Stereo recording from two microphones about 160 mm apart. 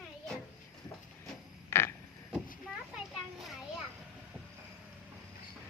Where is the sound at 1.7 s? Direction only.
15° left (ahead or behind).